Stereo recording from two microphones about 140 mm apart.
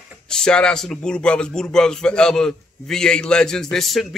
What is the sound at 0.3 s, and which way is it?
A man's voice, 5° left (ahead or behind).